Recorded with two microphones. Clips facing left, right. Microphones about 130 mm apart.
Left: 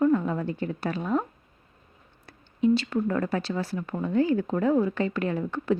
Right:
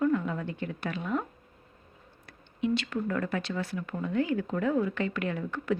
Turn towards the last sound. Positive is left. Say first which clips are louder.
# left 4 dB
turn(degrees=30)  # may be behind; listen again after turning